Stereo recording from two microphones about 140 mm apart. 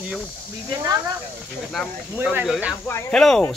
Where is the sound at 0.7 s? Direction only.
30° right (ahead or behind).